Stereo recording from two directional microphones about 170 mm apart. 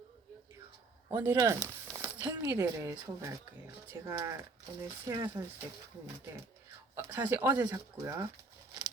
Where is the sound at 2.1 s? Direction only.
20° right (ahead or behind).